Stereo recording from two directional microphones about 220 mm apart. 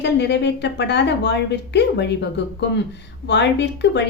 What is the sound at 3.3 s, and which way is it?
Speech, 50° left (ahead or behind).